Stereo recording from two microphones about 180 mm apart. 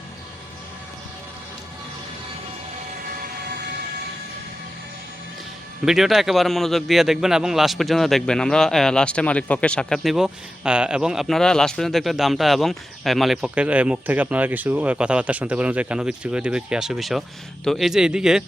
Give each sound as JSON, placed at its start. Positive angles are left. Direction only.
{"t": 3.5, "sound": "train", "side_deg": -65}
{"t": 5.8, "sound": "a man's voice", "side_deg": 0}